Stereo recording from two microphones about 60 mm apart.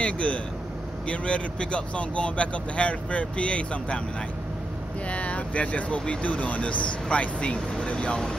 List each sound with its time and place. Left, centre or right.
0.0 s speech: centre
5.1 s speech: left